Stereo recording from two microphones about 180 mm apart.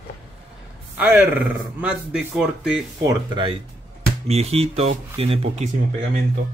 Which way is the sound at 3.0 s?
20° right (ahead or behind).